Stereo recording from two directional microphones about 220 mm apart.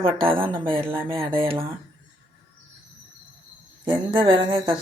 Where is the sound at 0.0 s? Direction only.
25° right (ahead or behind).